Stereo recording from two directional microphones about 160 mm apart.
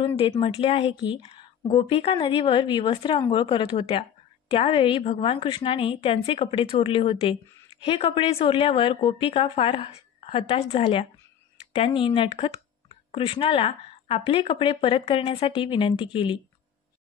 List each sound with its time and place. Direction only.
0.0 s speech: 35° left (ahead or behind)